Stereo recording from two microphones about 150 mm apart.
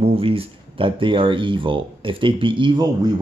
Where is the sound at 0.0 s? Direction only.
40° right (ahead or behind).